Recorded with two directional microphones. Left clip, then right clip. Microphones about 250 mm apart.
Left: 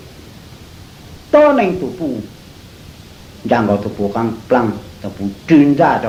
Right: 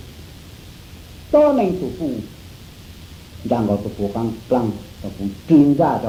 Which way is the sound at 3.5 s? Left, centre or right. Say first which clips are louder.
Left 6 dB; right.